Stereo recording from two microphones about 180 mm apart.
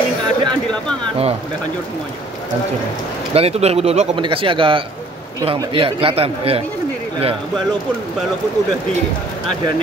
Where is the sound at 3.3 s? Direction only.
35° right (ahead or behind).